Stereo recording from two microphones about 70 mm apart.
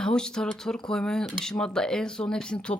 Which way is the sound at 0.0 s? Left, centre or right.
Centre.